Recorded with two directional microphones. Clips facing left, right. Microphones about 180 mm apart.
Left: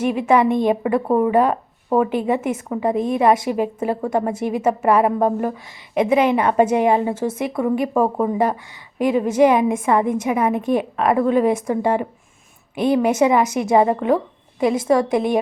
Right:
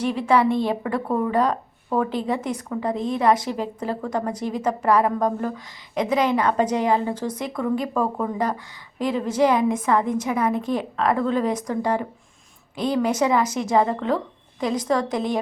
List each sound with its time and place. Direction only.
0.0 s a woman's voice: 15° left (ahead or behind)
4.1 s a woman's voice: 25° left (ahead or behind)
4.4 s a woman's voice: 10° left (ahead or behind)
7.2 s a woman's voice: 10° left (ahead or behind)
7.5 s a woman's voice: 25° left (ahead or behind)